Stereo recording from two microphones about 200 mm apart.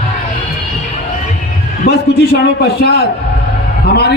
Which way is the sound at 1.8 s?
55° left (ahead or behind).